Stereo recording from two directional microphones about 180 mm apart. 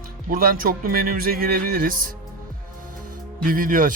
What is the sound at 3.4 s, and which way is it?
Speech, 50° right (ahead or behind).